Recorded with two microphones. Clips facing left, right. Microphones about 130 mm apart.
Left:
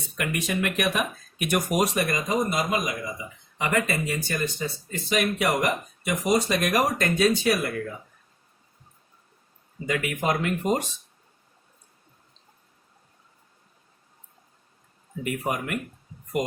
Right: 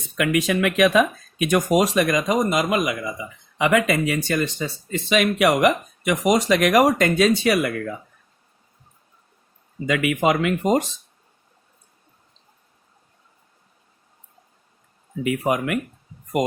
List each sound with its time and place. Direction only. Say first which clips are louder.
0.2 s speech: right 7 dB; 90° right
9.8 s speech: right 6 dB; 90° right
15.2 s speech: right 7 dB; 90° right